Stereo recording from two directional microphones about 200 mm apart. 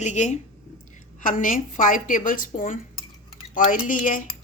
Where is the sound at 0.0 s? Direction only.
35° left (ahead or behind).